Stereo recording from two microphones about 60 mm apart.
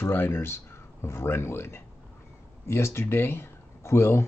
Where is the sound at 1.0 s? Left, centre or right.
Left.